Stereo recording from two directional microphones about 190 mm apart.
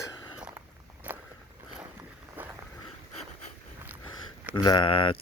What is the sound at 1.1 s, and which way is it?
Biting, 10° right (ahead or behind).